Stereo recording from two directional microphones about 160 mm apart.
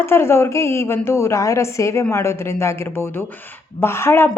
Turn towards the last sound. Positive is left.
turn(degrees=15)  # may be behind; listen again after turning